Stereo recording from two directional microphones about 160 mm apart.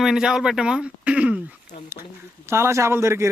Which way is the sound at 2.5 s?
15° right (ahead or behind).